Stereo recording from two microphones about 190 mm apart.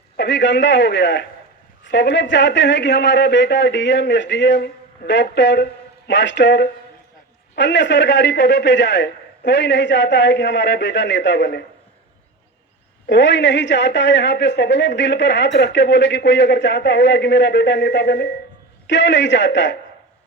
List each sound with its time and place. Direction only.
0.2 s a woman's voice: 65° left (ahead or behind)
13.1 s a woman's voice: 65° left (ahead or behind)